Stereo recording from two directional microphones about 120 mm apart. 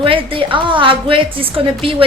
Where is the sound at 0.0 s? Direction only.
45° right (ahead or behind).